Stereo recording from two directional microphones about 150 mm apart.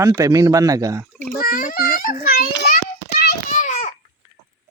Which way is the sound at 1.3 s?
70° left (ahead or behind).